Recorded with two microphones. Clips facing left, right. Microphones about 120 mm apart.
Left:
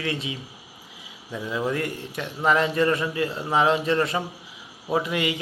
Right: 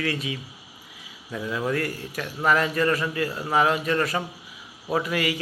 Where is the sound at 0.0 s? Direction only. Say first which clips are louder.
Right 1 dB; 25° left (ahead or behind).